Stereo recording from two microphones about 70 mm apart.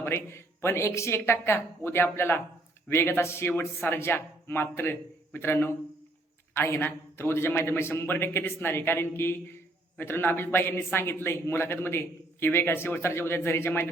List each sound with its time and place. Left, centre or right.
0.0 s a man's voice: left